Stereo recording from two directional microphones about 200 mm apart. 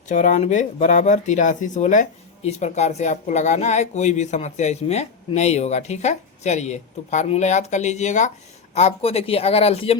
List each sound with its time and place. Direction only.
0.1 s speech: 35° left (ahead or behind)